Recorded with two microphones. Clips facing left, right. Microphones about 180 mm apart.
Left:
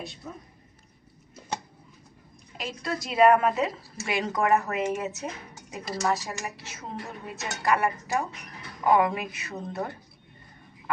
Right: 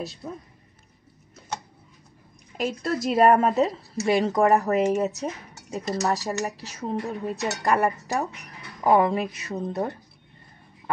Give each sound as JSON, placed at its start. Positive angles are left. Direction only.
{"t": 2.5, "sound": "speech", "side_deg": -45}